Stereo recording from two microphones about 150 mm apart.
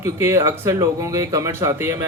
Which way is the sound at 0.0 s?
15° right (ahead or behind).